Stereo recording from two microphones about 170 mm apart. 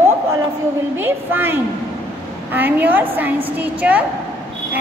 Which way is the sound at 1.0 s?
10° right (ahead or behind).